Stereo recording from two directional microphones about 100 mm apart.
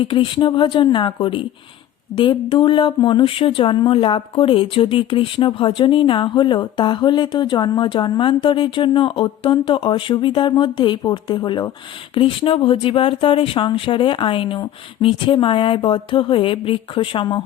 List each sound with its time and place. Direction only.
0.0 s speech: 60° left (ahead or behind)